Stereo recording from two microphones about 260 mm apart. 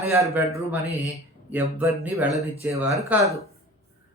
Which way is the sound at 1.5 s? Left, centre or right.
Centre.